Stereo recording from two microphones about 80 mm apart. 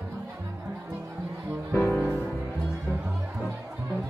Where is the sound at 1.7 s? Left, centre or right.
Left.